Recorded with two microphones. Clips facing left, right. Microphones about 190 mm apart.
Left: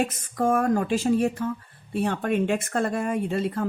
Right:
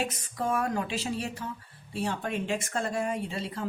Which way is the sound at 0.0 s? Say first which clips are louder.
Left 7 dB; 50° left (ahead or behind).